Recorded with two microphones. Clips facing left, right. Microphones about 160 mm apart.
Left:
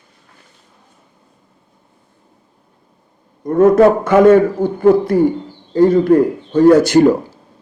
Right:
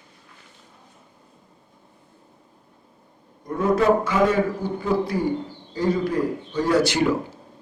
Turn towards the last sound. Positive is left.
turn(degrees=45)  # may be behind; listen again after turning